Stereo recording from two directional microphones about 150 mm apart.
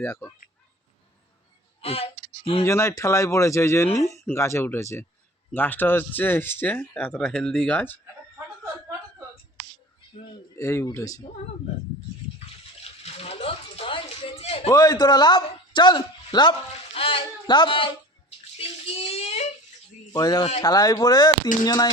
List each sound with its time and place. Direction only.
0.0 s speech: 15° left (ahead or behind)
1.8 s speech: 40° left (ahead or behind)
2.6 s speech: 20° left (ahead or behind)
10.6 s speech: 20° left (ahead or behind)
12.8 s a sound: 45° left (ahead or behind)
14.7 s a man's voice: 25° left (ahead or behind)
18.5 s bathtub: 40° left (ahead or behind)
20.1 s speech: 25° left (ahead or behind)